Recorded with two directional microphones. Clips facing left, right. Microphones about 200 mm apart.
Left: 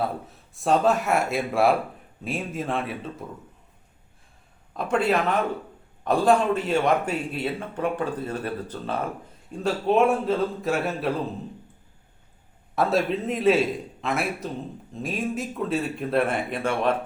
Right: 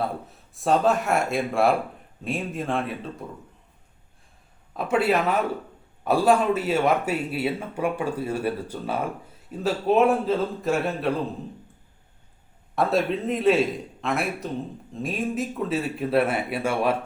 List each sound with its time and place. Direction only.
0.0 s speech: centre (ahead or behind)
4.7 s speech: 5° right (ahead or behind)
12.7 s speech: centre (ahead or behind)